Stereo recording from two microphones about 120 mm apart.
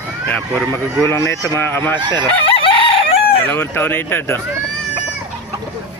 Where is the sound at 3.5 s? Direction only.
15° left (ahead or behind).